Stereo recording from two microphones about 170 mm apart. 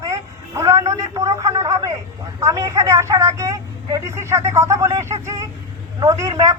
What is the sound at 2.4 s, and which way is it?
A woman's voice, 20° right (ahead or behind).